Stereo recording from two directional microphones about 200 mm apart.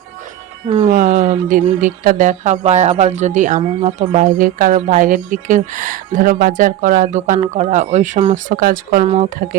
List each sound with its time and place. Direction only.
0.9 s speech: 40° right (ahead or behind)
9.0 s speech: 35° right (ahead or behind)